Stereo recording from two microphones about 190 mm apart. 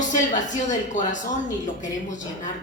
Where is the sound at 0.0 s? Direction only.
40° left (ahead or behind).